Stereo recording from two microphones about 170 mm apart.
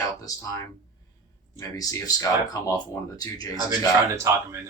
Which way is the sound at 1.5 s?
20° left (ahead or behind).